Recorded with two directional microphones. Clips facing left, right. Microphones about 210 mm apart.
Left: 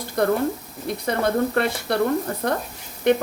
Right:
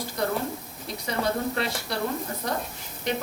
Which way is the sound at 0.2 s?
55° left (ahead or behind).